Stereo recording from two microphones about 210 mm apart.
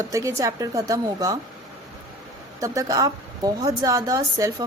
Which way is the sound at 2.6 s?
15° right (ahead or behind).